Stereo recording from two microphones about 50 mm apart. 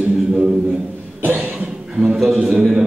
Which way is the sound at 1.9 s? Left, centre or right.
Centre.